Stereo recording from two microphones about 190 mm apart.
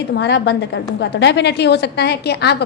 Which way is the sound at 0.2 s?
65° left (ahead or behind).